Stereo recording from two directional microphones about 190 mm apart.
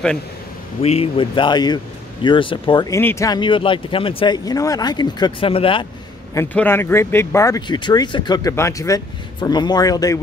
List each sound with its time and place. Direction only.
0.8 s speech: 30° left (ahead or behind)
6.3 s speech: 10° left (ahead or behind)